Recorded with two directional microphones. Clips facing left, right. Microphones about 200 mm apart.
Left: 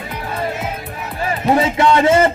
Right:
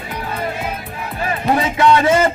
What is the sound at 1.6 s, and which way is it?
Speech, 25° left (ahead or behind).